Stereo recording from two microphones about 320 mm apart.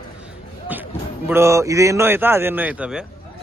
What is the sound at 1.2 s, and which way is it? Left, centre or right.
A man's voice, centre.